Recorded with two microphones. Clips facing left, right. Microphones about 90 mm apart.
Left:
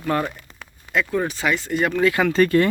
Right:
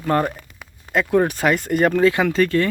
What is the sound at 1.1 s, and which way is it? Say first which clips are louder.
Speech: right 8 dB; 55° right (ahead or behind).